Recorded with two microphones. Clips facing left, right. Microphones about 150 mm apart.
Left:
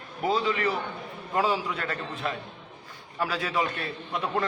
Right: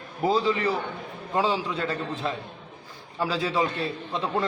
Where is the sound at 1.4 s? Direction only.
25° right (ahead or behind).